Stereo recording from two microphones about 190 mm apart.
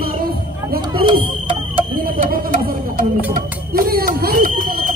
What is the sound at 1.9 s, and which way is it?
A man's voice, 50° right (ahead or behind).